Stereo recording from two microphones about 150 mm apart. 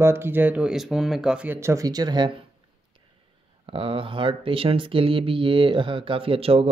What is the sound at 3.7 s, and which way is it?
Speech, 35° right (ahead or behind).